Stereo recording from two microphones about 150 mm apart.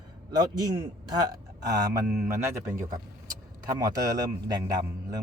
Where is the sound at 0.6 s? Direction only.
25° right (ahead or behind).